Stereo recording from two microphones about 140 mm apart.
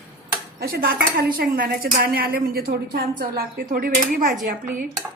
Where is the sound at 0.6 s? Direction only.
90° right.